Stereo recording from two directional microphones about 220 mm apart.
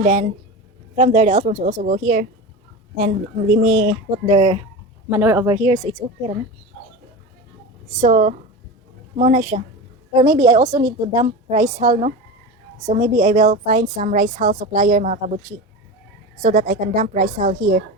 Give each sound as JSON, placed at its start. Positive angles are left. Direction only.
{"t": 0.0, "sound": "a woman's voice", "side_deg": -35}
{"t": 4.3, "sound": "a woman's voice", "side_deg": -20}
{"t": 5.0, "sound": "speech", "side_deg": -10}
{"t": 5.6, "sound": "a woman's voice", "side_deg": -20}
{"t": 8.0, "sound": "a woman's voice", "side_deg": -30}
{"t": 10.1, "sound": "a woman's voice", "side_deg": -20}
{"t": 16.4, "sound": "a woman's voice", "side_deg": -35}